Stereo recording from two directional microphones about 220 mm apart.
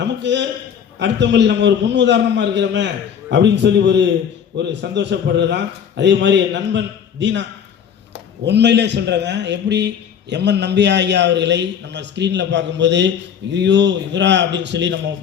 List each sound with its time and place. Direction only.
0.0 s a sound: 55° right (ahead or behind)
0.9 s a man's voice: 55° right (ahead or behind)
8.4 s a man's voice: 50° right (ahead or behind)